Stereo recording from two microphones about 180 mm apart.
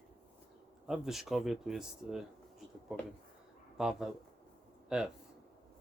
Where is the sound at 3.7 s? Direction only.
5° right (ahead or behind).